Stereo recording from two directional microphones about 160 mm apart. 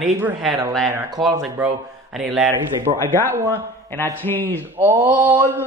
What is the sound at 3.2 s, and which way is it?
Mantra, 15° right (ahead or behind).